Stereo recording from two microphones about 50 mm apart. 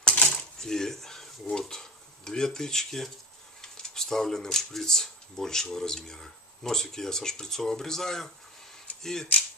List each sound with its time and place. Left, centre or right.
0.0 s cutlery: left
0.6 s speech: centre